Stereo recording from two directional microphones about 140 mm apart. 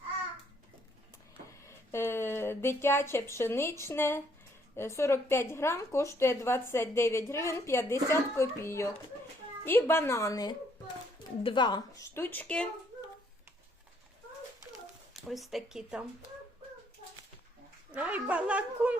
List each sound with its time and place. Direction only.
1.6 s a woman's voice: 20° left (ahead or behind)
12.1 s speech: 15° left (ahead or behind)
15.1 s speech: centre (ahead or behind)
17.9 s speech: 10° right (ahead or behind)